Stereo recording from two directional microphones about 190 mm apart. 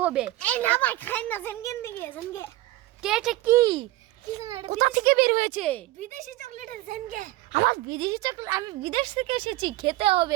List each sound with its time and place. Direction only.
0.0 s speech: 5° right (ahead or behind)
0.4 s a woman's voice: 10° left (ahead or behind)
3.0 s speech: 5° right (ahead or behind); by 3.8 s 20° right (ahead or behind)
4.5 s speech: 35° right (ahead or behind)
5.5 s a woman's voice: 5° left (ahead or behind)
6.0 s speech: 40° right (ahead or behind)
7.9 s speech: 20° right (ahead or behind)